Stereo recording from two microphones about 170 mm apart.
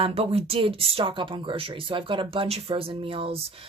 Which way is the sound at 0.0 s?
35° right (ahead or behind).